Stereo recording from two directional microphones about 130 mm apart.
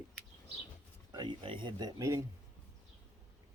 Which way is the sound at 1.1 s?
35° right (ahead or behind).